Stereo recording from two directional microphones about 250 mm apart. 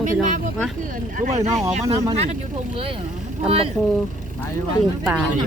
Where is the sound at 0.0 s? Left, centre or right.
Right.